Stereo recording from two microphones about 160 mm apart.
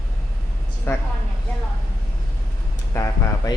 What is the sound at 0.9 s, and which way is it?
Speech, 15° left (ahead or behind).